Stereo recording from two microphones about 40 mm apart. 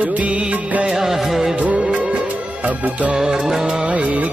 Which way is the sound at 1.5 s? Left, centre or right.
Right.